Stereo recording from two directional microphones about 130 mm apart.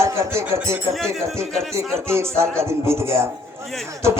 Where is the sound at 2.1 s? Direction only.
20° right (ahead or behind).